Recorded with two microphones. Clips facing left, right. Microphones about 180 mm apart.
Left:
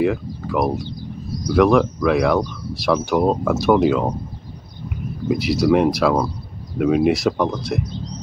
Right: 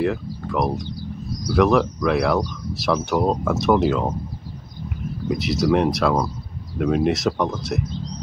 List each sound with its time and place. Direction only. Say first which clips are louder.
0.0 s speech: left 3 dB; centre (ahead or behind)
5.3 s speech: left 3 dB; centre (ahead or behind)